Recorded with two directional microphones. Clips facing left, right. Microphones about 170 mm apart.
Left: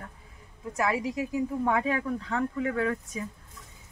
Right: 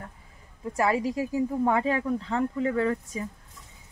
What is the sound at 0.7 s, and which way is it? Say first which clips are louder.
Speech: right 3 dB; 30° right (ahead or behind).